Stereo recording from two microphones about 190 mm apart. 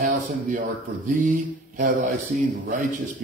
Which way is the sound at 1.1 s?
40° right (ahead or behind).